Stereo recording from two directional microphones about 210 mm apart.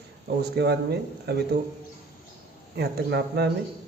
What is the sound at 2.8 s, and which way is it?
Speech, 50° right (ahead or behind).